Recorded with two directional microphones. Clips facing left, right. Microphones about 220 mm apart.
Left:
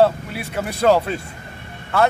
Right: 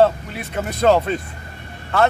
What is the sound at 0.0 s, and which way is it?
Speech, 10° left (ahead or behind).